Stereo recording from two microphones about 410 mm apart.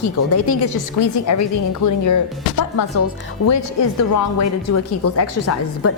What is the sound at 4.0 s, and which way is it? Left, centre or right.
Speech, left.